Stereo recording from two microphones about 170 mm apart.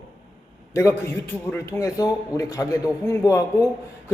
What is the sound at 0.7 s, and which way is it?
A man's voice, 15° left (ahead or behind).